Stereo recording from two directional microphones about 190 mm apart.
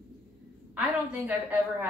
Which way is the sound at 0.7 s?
5° right (ahead or behind).